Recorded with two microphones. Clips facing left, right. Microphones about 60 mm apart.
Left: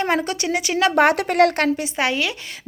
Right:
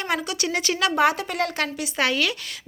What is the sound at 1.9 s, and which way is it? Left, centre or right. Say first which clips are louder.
Speech: left 1 dB; left.